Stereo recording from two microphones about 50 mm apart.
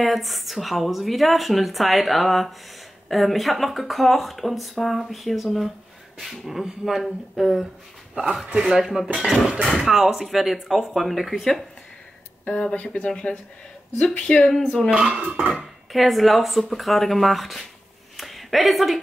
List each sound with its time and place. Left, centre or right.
0.0 s speech: centre
8.6 s dishes: centre
9.2 s speech: centre
12.4 s speech: left
14.9 s speech: right
15.5 s speech: centre
18.1 s a sound: centre